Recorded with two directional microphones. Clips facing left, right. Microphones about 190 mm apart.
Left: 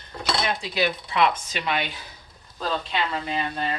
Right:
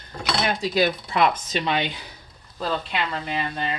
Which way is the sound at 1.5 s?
30° right (ahead or behind).